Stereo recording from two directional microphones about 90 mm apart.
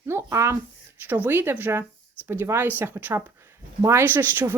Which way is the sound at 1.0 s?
20° right (ahead or behind).